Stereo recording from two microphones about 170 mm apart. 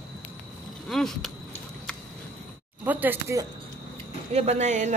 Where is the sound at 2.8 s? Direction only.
10° right (ahead or behind).